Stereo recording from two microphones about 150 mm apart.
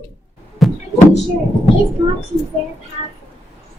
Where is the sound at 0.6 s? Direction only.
Centre (ahead or behind).